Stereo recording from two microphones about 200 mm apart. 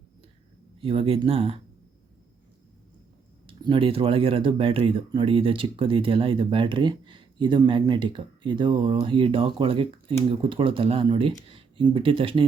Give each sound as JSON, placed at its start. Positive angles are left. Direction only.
{"t": 0.8, "sound": "speech", "side_deg": -30}
{"t": 3.4, "sound": "speech", "side_deg": -25}